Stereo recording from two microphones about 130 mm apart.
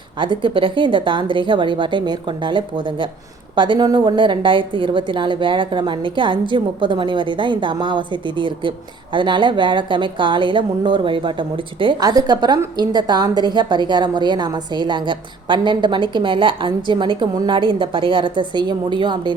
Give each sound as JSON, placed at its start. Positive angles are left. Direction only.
{"t": 0.2, "sound": "speech", "side_deg": -40}